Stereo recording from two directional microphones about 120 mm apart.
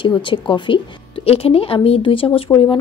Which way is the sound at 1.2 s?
55° left (ahead or behind).